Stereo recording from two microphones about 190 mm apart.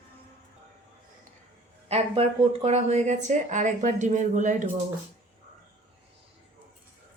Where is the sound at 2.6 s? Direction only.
35° right (ahead or behind).